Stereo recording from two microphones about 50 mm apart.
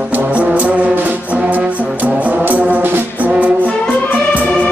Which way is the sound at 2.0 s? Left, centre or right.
Right.